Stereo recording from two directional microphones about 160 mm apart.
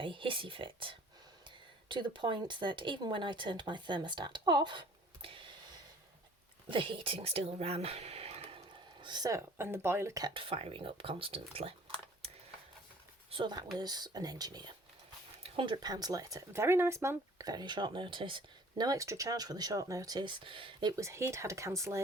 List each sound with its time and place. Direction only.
0.0 s speech: 30° right (ahead or behind)
6.7 s speech: 30° right (ahead or behind)
13.3 s speech: 30° right (ahead or behind)
20.9 s speech: 20° right (ahead or behind)